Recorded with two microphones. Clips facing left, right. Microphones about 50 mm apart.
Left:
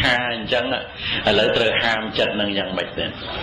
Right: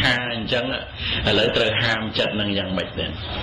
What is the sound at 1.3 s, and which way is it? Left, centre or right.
Speech, centre.